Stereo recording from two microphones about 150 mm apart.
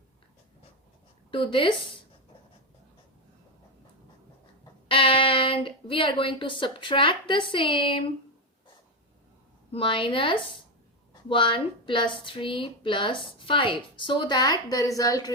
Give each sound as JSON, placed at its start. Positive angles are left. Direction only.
{"t": 1.3, "sound": "speech", "side_deg": 35}
{"t": 4.6, "sound": "speech", "side_deg": 35}
{"t": 9.7, "sound": "a woman's voice", "side_deg": 35}